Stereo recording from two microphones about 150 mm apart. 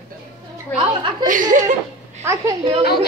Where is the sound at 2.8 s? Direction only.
90° left.